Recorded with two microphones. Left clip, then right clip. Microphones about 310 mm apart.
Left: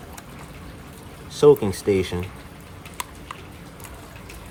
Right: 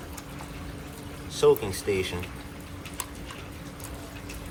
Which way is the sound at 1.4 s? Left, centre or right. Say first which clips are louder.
Left 6 dB; left.